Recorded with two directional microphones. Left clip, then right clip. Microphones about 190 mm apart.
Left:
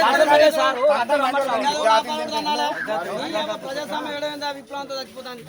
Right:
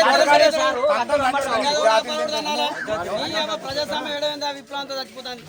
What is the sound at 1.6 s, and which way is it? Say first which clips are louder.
A man's voice: right 1 dB; 40° right (ahead or behind).